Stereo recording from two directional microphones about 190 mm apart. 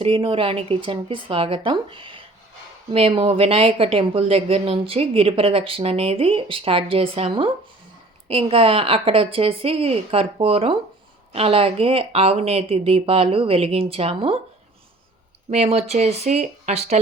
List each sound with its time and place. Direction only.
0.0 s a woman's voice: 30° right (ahead or behind)
15.4 s speech: 35° right (ahead or behind)